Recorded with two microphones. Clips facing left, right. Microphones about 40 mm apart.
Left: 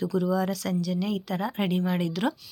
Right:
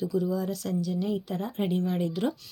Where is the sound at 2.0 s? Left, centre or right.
Left.